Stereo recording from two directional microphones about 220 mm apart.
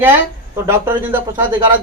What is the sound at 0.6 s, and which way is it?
Speech, 10° right (ahead or behind).